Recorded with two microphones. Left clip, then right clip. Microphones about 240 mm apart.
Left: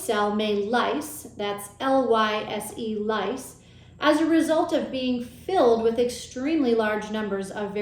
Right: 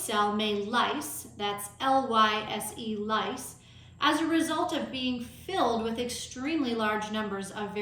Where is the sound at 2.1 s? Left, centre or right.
Centre.